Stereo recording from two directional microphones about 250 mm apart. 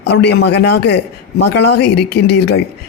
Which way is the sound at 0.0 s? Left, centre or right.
Left.